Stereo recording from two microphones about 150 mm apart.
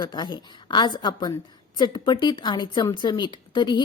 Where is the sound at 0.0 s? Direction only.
30° left (ahead or behind).